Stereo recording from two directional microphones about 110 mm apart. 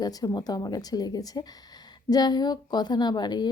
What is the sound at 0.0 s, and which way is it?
Speech, 35° left (ahead or behind).